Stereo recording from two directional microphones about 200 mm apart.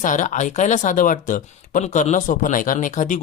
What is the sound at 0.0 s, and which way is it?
Speech, 40° left (ahead or behind).